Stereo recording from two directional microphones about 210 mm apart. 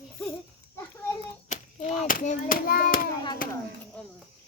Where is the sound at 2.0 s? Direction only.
40° left (ahead or behind).